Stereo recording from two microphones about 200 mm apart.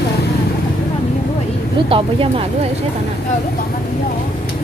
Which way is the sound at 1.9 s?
25° right (ahead or behind).